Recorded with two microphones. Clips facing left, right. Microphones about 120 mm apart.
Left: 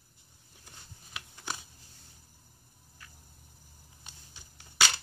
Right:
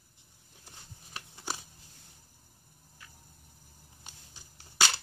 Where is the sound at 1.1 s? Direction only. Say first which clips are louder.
Right 1 dB; 35° right (ahead or behind).